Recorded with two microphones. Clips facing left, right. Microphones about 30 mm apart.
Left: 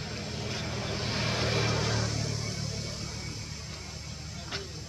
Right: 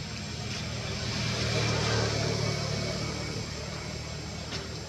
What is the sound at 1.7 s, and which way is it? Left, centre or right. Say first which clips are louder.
Vehicle: right 1 dB; centre.